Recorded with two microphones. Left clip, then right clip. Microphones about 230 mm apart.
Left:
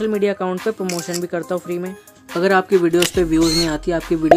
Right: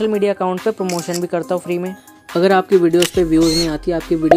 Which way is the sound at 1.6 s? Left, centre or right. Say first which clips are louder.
Right 3 dB; centre.